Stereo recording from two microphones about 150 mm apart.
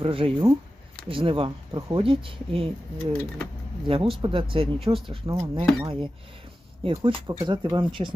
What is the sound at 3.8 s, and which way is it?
Speech, 35° right (ahead or behind).